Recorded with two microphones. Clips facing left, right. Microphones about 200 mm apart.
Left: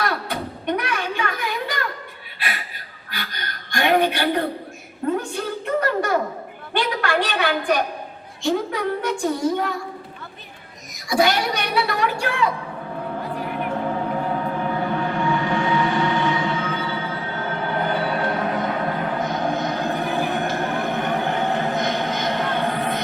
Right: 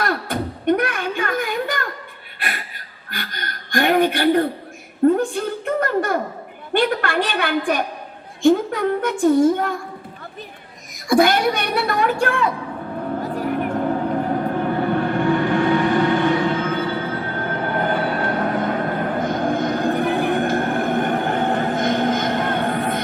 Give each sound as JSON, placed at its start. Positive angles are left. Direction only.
{"t": 0.0, "sound": "music", "side_deg": -50}
{"t": 3.1, "sound": "a sound", "side_deg": -50}
{"t": 6.7, "sound": "a woman's voice", "side_deg": -50}
{"t": 11.1, "sound": "a woman's voice", "side_deg": -50}
{"t": 13.3, "sound": "music", "side_deg": -45}